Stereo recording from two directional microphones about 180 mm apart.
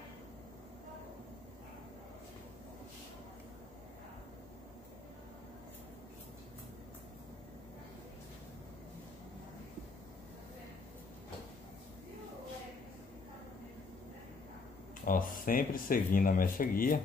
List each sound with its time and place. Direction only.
15.0 s speech: 50° left (ahead or behind)